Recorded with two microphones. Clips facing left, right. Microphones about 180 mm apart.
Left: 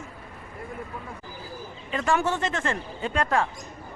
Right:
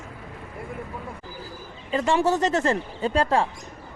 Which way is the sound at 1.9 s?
30° right (ahead or behind).